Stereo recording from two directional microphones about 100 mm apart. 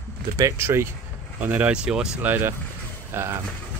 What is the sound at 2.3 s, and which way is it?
Speech, 20° right (ahead or behind).